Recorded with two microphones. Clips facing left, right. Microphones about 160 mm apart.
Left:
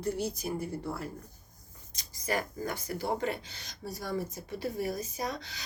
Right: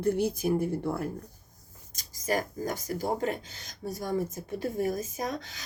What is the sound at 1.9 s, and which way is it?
Speech, 45° right (ahead or behind).